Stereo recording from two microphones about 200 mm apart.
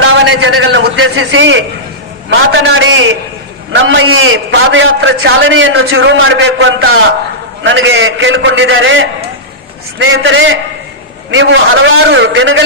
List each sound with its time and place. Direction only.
0.0 s a man's voice: 75° right (ahead or behind)